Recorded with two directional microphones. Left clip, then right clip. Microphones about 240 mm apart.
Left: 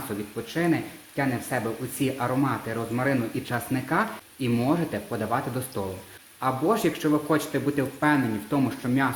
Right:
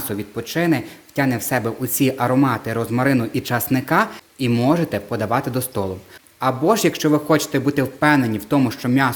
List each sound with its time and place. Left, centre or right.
0.4 s speech: right